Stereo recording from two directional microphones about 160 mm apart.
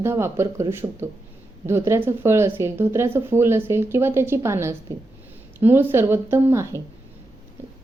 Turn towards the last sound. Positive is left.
turn(degrees=-15)  # may be behind; listen again after turning